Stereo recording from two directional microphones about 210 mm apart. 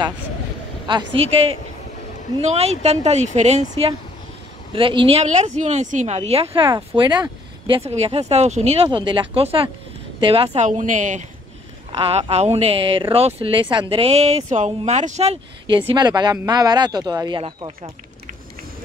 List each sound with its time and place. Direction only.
0.8 s speech: 25° right (ahead or behind)
15.7 s speech: 20° right (ahead or behind)